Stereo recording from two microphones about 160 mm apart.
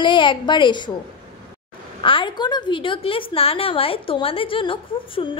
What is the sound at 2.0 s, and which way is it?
A woman's voice, 30° left (ahead or behind).